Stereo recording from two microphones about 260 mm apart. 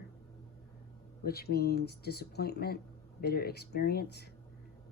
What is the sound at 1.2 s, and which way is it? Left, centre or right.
Speech, left.